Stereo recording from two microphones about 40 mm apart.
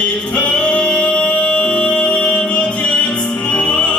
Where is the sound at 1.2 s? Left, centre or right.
Left.